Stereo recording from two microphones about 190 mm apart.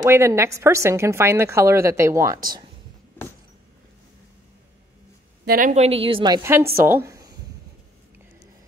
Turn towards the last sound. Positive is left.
turn(degrees=-15)  # may be behind; listen again after turning